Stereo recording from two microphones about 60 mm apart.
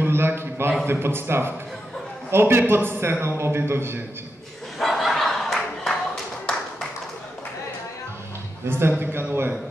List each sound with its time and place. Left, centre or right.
0.0 s a man's voice: right
4.7 s dog: centre
8.6 s a man's voice: right